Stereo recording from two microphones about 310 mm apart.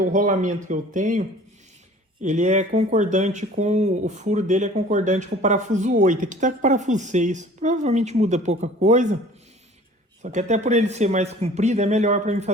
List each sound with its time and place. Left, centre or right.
0.0 s speech: right
2.2 s speech: right
10.2 s speech: right